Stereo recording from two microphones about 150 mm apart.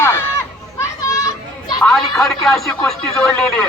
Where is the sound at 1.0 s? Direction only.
20° left (ahead or behind).